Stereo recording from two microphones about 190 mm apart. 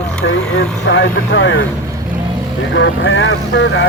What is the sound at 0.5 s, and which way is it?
Speech, 75° left (ahead or behind).